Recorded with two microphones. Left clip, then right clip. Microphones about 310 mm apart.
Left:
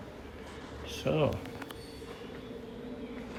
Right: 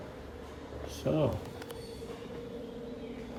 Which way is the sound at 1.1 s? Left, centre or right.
Centre.